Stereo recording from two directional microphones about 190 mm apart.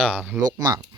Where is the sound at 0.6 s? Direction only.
15° right (ahead or behind).